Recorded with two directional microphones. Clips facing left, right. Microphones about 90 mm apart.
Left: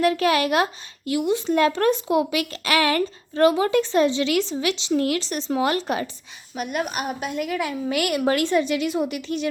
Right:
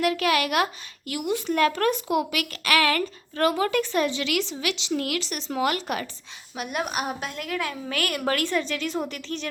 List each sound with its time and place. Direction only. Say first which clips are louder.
0.0 s speech: left 3 dB; 30° left (ahead or behind)
6.6 s a woman's voice: left 2 dB; centre (ahead or behind)